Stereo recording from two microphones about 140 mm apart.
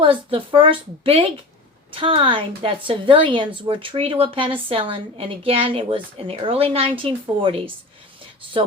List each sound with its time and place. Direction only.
0.0 s a woman's voice: 40° right (ahead or behind)